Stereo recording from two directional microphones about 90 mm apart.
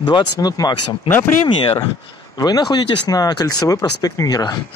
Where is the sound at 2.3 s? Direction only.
45° left (ahead or behind).